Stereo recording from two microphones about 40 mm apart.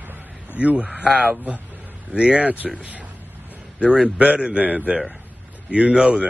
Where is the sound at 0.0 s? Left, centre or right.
Right.